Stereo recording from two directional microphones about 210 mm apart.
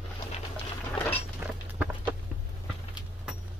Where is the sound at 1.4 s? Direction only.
10° right (ahead or behind).